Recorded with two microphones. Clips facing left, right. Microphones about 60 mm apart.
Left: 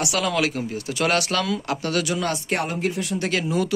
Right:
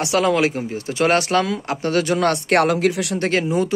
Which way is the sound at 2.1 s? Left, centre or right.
Right.